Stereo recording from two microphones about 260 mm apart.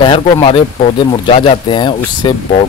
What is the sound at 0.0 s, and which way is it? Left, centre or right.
Speech, centre.